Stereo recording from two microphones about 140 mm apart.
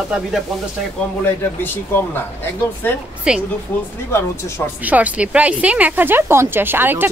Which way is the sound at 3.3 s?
5° right (ahead or behind).